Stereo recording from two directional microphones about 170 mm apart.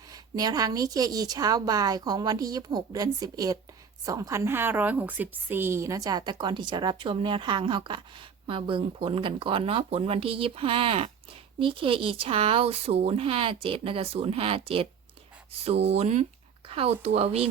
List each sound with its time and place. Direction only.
0.1 s a woman's voice: 20° right (ahead or behind)